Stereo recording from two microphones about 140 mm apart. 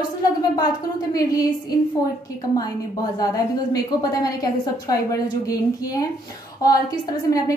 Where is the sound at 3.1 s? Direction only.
25° left (ahead or behind).